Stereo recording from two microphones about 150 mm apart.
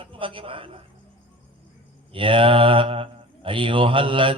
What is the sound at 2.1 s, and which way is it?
Speech, 35° right (ahead or behind).